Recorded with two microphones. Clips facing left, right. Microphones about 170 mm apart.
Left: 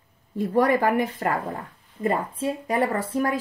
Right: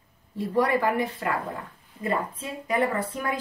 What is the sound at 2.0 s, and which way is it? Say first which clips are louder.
Speech: left 4 dB; 45° left (ahead or behind).